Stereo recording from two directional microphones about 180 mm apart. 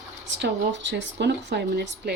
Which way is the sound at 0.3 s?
85° right.